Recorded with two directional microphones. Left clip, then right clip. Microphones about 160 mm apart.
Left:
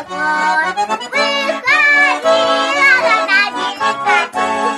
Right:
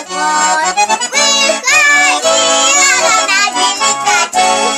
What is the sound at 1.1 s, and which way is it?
Music, 55° right (ahead or behind).